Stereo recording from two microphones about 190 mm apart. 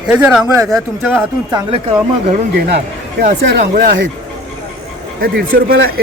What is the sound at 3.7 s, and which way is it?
Speech, 50° right (ahead or behind).